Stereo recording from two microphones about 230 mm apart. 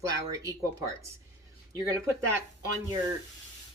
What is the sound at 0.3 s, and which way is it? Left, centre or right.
Speech, centre.